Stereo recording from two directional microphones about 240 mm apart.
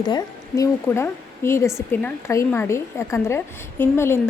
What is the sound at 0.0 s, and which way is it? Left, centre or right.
A woman's voice, centre.